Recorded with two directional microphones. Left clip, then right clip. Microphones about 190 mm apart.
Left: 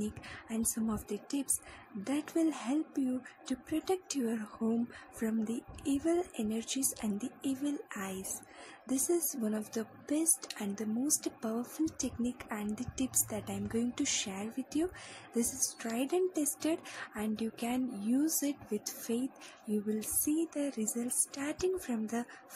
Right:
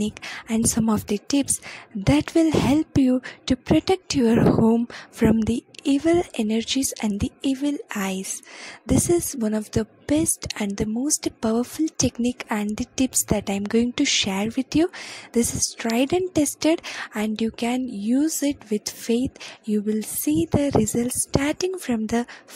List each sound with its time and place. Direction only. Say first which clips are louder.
0.0 s a woman's voice: right 12 dB; 45° right (ahead or behind)